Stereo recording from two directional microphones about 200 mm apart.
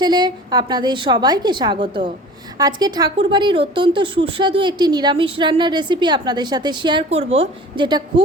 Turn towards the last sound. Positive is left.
turn(degrees=-25)  # may be behind; listen again after turning